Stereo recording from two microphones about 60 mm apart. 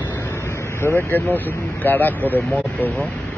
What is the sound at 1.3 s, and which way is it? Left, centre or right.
Speech, left.